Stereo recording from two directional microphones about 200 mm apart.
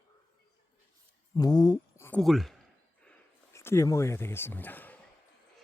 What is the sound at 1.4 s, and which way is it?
Speech, 20° left (ahead or behind).